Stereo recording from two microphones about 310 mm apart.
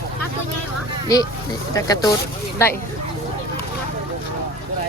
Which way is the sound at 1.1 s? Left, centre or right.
Centre.